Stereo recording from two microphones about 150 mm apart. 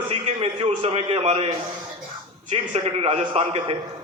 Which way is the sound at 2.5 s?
40° right (ahead or behind).